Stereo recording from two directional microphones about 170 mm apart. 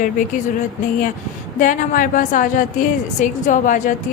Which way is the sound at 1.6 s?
50° left (ahead or behind).